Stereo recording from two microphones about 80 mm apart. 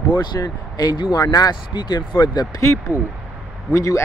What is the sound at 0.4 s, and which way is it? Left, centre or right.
Speech, left.